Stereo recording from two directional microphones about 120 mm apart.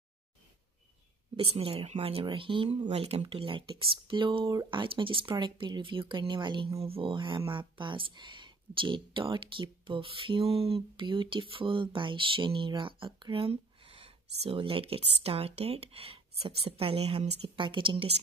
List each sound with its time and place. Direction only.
1.3 s speech: 50° right (ahead or behind)
6.8 s speech: 50° right (ahead or behind)
17.6 s speech: 45° right (ahead or behind)